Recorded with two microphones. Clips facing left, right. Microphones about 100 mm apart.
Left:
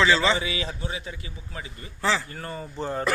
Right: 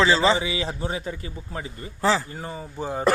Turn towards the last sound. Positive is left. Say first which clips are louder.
# even
turn(degrees=-10)  # may be behind; listen again after turning